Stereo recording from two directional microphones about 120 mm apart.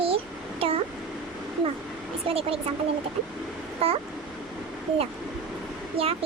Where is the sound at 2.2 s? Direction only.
55° right (ahead or behind).